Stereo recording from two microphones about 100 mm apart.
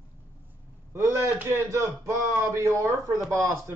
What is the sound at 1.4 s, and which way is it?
A man's voice, 25° right (ahead or behind).